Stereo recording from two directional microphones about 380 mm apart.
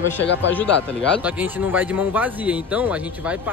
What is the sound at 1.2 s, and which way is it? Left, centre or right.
Speech, centre.